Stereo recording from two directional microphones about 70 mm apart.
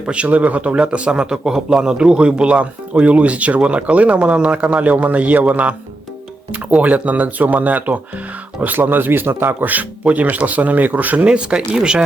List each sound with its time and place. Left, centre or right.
0.1 s speech: centre